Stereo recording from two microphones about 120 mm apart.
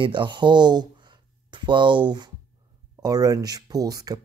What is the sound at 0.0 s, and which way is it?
Speech, 40° right (ahead or behind).